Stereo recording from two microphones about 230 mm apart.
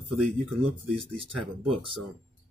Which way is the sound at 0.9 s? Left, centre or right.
Right.